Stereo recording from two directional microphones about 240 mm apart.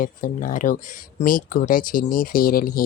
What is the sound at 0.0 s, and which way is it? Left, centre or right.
Speech, left.